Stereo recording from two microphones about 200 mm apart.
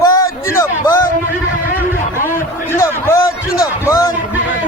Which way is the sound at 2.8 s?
15° left (ahead or behind).